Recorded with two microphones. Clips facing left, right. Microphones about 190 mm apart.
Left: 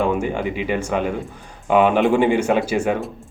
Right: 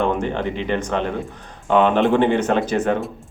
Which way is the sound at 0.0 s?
10° left (ahead or behind).